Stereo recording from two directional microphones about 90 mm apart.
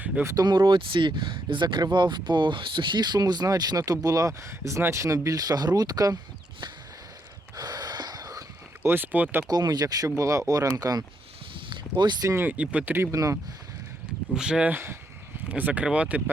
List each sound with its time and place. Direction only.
0.7 s speech: 70° right (ahead or behind); by 6.1 s 45° right (ahead or behind)
7.5 s gasp: 45° right (ahead or behind)
8.8 s speech: 25° right (ahead or behind)
9.5 s speech: 45° right (ahead or behind)
11.7 s speech: 60° right (ahead or behind)
12.4 s speech: 15° right (ahead or behind)
13.1 s speech: 35° right (ahead or behind)
14.3 s speech: 5° right (ahead or behind)
14.7 s speech: 25° right (ahead or behind)
15.4 s speech: 15° right (ahead or behind)